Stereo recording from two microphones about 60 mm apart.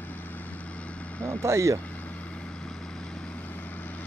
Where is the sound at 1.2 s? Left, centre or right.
Right.